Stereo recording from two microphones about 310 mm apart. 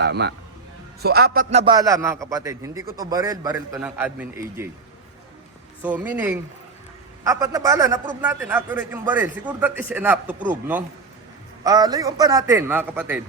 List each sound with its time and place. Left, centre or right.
0.0 s a man's voice: right; by 4.7 s centre
5.8 s a man's voice: centre